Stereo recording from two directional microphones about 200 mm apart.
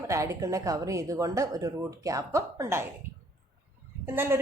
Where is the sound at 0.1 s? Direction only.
15° right (ahead or behind).